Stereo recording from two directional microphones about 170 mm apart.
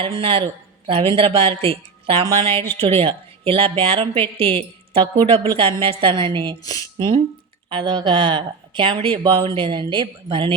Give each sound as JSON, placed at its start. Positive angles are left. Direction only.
{"t": 0.0, "sound": "a woman's voice", "side_deg": -30}
{"t": 7.7, "sound": "speech", "side_deg": -30}